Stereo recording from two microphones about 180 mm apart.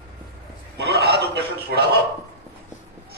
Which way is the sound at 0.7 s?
65° right (ahead or behind).